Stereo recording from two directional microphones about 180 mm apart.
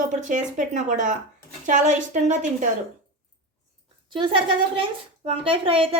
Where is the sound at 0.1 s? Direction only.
45° right (ahead or behind).